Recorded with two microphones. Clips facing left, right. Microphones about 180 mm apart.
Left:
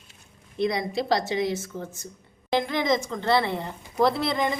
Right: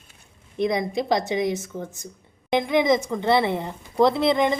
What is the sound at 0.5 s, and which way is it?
A woman's voice, 20° right (ahead or behind).